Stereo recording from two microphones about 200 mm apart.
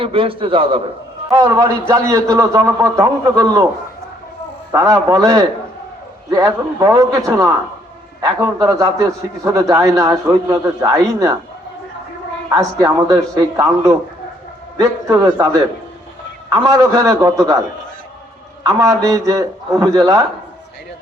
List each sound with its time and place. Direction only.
0.0 s a man's voice: 25° right (ahead or behind)
4.7 s a man's voice: 15° right (ahead or behind)
12.5 s a man's voice: 15° right (ahead or behind)
18.6 s a man's voice: 15° right (ahead or behind)